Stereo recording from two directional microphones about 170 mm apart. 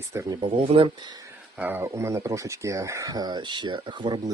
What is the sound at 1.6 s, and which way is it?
Speech, 15° right (ahead or behind).